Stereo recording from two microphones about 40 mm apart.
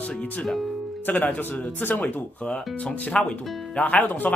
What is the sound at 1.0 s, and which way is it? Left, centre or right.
Speech, left.